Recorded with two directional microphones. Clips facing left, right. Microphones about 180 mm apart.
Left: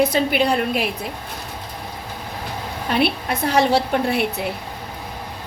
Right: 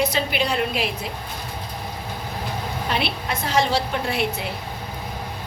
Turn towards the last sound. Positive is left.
turn(degrees=55)  # may be behind; listen again after turning